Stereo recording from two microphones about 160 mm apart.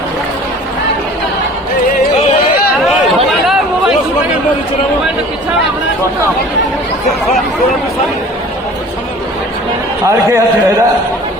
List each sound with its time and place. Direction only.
3.4 s chatter: centre (ahead or behind)
10.1 s a man's voice: 20° right (ahead or behind)